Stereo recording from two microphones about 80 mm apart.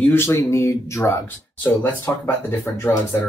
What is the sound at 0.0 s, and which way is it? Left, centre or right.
Speech, left.